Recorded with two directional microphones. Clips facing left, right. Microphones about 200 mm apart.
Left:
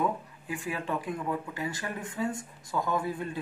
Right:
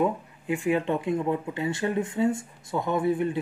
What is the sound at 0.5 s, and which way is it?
Speech, 25° right (ahead or behind).